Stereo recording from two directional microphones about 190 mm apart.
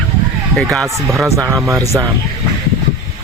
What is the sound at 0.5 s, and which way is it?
Speech, 5° left (ahead or behind).